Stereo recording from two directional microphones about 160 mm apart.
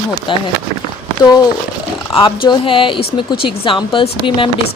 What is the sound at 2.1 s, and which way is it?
Speech, 30° left (ahead or behind).